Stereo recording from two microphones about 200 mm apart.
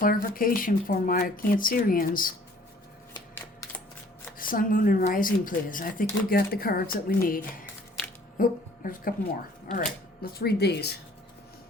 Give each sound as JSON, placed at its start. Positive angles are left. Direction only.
{"t": 0.0, "sound": "speech", "side_deg": 45}
{"t": 4.4, "sound": "speech", "side_deg": 45}
{"t": 10.3, "sound": "speech", "side_deg": 55}